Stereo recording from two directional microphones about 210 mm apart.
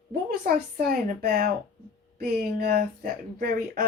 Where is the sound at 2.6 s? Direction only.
45° right (ahead or behind).